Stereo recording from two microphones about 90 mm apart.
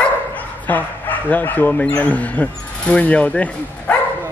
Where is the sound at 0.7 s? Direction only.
20° left (ahead or behind).